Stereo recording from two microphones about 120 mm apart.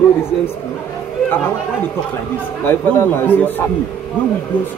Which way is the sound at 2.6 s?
20° left (ahead or behind).